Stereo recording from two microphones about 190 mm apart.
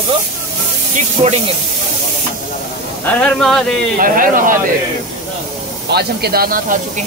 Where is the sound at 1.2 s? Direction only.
35° right (ahead or behind).